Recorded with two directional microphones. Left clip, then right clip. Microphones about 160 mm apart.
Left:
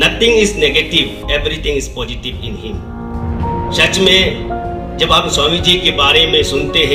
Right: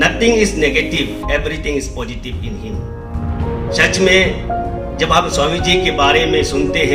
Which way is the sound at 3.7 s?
35° left (ahead or behind).